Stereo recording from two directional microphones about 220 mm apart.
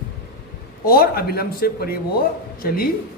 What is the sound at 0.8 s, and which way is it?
Speech, 40° left (ahead or behind).